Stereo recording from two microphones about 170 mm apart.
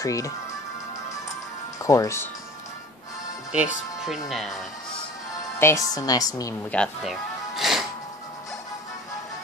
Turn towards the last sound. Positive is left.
turn(degrees=0)  # may be behind; listen again after turning